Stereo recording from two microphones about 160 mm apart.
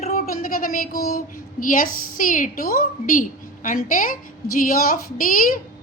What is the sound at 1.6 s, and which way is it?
A woman's voice, 60° left (ahead or behind).